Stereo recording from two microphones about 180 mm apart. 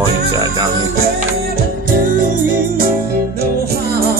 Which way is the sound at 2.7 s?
55° right (ahead or behind).